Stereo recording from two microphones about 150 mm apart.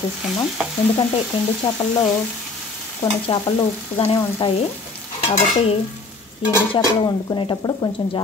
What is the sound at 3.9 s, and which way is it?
Speech, 35° left (ahead or behind).